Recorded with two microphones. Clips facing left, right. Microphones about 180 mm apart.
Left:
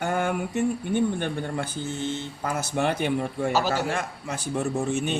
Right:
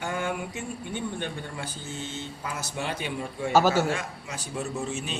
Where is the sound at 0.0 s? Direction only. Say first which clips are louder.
Left 5 dB; 50° left (ahead or behind).